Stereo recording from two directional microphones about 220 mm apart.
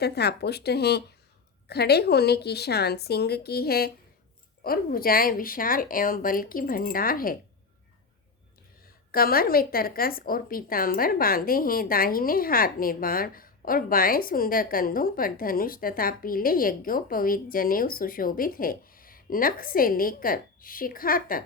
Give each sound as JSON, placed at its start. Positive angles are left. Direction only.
{"t": 0.0, "sound": "a woman's voice", "side_deg": 45}
{"t": 9.1, "sound": "a woman's voice", "side_deg": 40}